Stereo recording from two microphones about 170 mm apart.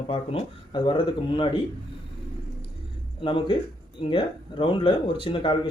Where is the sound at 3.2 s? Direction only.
30° left (ahead or behind).